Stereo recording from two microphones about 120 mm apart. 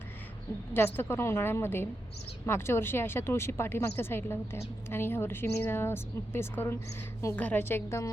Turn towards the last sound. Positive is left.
turn(degrees=20)  # may be behind; listen again after turning